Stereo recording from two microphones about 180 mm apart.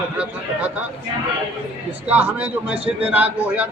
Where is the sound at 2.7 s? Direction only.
30° right (ahead or behind).